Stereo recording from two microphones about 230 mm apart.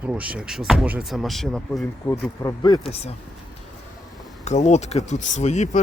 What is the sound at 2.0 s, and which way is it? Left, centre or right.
Speech, centre.